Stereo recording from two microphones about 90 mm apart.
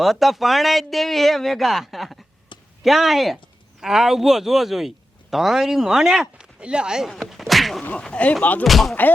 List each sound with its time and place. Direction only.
0.0 s speech: centre (ahead or behind)
2.5 s a sound: 65° left (ahead or behind)
2.8 s speech: 5° right (ahead or behind)
7.1 s whack: centre (ahead or behind)
7.9 s speech: 15° left (ahead or behind)
8.6 s speech: centre (ahead or behind)